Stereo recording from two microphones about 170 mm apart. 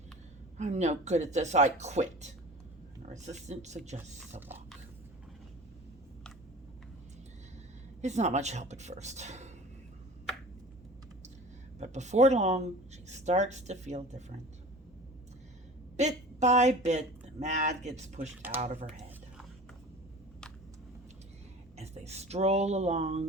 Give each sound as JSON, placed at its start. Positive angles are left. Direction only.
{"t": 0.5, "sound": "speech", "side_deg": -45}
{"t": 3.1, "sound": "speech", "side_deg": -45}
{"t": 8.0, "sound": "speech", "side_deg": -40}
{"t": 11.8, "sound": "speech", "side_deg": -45}
{"t": 16.0, "sound": "speech", "side_deg": -45}
{"t": 21.8, "sound": "speech", "side_deg": -40}